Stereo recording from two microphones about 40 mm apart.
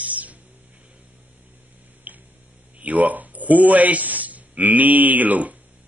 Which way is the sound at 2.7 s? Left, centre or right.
Right.